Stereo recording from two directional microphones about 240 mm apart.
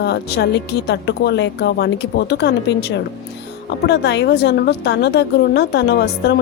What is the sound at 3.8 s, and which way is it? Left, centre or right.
A woman's voice, left.